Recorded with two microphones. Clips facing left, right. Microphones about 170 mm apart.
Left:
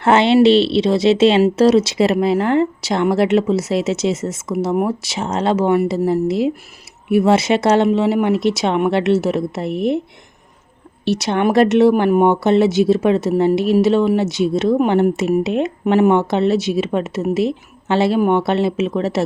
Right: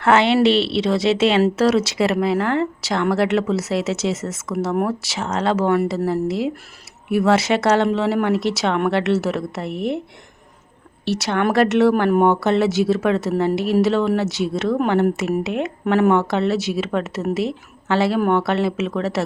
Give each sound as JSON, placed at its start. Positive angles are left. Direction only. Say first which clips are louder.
{"t": 0.0, "sound": "speech", "louder": "left 3 dB", "side_deg": 20}
{"t": 11.0, "sound": "speech", "louder": "left 3 dB", "side_deg": 20}